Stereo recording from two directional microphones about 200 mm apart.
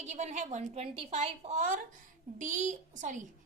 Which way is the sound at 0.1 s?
35° right (ahead or behind).